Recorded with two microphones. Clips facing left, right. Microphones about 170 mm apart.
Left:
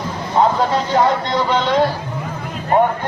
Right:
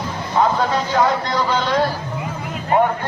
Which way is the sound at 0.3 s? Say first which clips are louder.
Left 2 dB; 25° left (ahead or behind).